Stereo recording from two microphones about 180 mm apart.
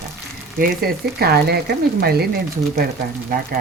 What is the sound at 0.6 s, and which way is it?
Speech, 60° right (ahead or behind).